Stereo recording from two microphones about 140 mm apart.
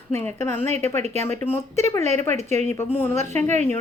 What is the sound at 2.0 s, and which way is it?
Speech, 55° right (ahead or behind).